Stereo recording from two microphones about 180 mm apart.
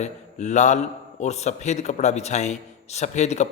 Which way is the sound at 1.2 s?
40° left (ahead or behind).